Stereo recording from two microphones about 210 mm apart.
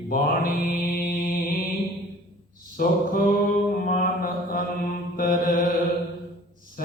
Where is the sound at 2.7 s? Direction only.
40° left (ahead or behind).